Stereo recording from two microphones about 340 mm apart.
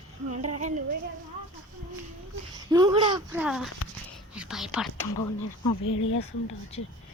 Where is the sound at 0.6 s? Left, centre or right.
Right.